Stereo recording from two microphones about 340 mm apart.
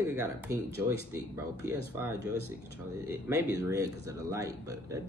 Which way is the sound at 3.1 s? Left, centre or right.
Centre.